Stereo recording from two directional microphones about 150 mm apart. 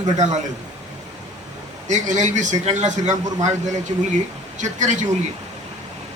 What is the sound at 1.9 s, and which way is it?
A man's voice, 55° right (ahead or behind).